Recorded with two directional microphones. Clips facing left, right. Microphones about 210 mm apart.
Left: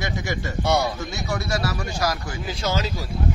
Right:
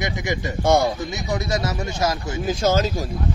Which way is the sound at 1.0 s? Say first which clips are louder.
Right 3 dB; 20° right (ahead or behind).